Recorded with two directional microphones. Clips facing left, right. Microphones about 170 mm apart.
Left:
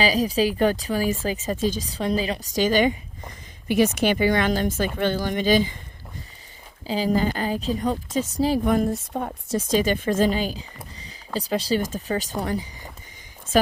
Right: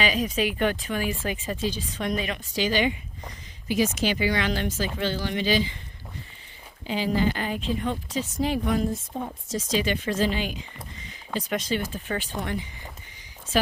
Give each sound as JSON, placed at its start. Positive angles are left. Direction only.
{"t": 0.0, "sound": "speech", "side_deg": 35}
{"t": 3.7, "sound": "a woman's voice", "side_deg": 60}
{"t": 6.8, "sound": "speech", "side_deg": 40}
{"t": 8.9, "sound": "a woman's voice", "side_deg": 65}